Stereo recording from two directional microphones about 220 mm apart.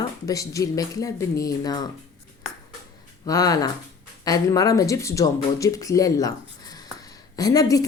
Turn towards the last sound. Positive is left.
turn(degrees=15)  # may be behind; listen again after turning